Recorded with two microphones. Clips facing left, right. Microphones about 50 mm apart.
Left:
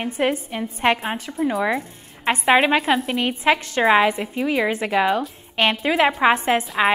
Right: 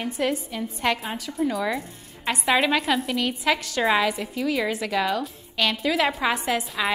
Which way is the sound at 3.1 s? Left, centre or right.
Left.